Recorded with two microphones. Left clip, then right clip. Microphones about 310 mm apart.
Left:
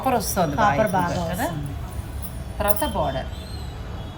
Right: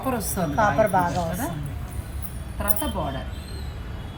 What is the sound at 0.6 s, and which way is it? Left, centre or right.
Speech, centre.